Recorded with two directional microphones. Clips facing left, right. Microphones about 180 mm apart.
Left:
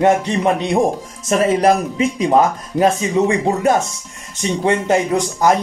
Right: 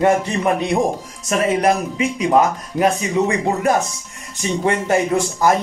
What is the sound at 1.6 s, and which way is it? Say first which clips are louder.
Speech: left 3 dB; 30° left (ahead or behind).